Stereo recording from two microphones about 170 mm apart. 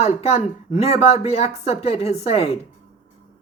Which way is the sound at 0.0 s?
40° left (ahead or behind).